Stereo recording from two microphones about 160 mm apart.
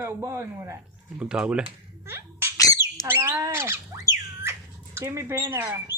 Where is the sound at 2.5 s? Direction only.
20° left (ahead or behind).